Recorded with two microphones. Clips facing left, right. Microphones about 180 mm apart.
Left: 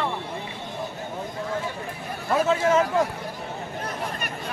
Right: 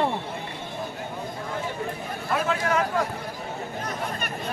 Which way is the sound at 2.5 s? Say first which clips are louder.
Left 5 dB; 25° left (ahead or behind).